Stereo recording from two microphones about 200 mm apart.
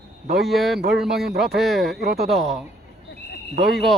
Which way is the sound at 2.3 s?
Centre (ahead or behind).